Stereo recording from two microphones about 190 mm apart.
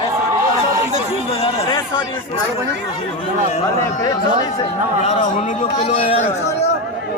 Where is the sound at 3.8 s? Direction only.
15° left (ahead or behind).